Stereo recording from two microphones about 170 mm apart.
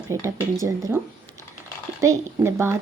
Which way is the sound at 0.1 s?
20° right (ahead or behind).